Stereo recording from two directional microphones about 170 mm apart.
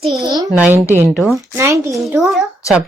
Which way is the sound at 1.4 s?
20° right (ahead or behind).